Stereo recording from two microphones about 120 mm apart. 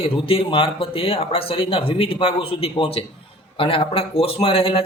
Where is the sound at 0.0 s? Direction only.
50° left (ahead or behind).